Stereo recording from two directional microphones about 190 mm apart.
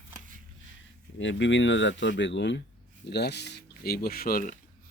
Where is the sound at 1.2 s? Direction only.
75° left (ahead or behind).